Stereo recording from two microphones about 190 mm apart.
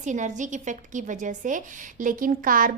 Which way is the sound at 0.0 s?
40° right (ahead or behind).